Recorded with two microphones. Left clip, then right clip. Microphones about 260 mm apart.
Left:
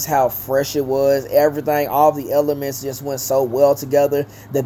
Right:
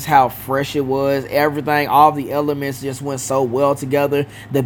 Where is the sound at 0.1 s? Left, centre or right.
Right.